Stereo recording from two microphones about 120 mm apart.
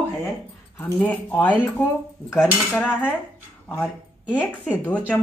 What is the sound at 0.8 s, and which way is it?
Speech, 10° left (ahead or behind).